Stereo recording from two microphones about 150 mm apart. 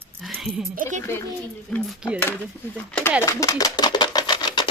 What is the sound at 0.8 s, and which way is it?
Speech, 55° right (ahead or behind).